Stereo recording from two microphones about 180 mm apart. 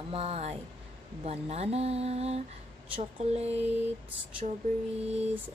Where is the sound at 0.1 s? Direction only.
35° right (ahead or behind).